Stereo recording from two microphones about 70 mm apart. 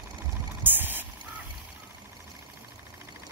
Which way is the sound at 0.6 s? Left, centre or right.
Right.